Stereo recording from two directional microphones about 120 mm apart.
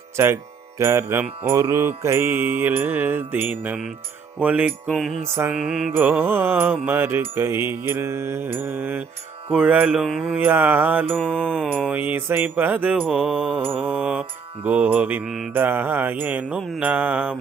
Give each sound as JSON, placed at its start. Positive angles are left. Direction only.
{"t": 0.2, "sound": "mantra", "side_deg": -20}
{"t": 4.9, "sound": "mantra", "side_deg": 0}
{"t": 5.9, "sound": "mantra", "side_deg": -15}
{"t": 11.2, "sound": "mantra", "side_deg": 5}
{"t": 11.9, "sound": "mantra", "side_deg": -15}
{"t": 15.5, "sound": "mantra", "side_deg": -15}